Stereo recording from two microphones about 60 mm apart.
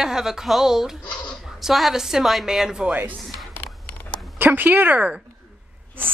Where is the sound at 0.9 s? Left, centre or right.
Centre.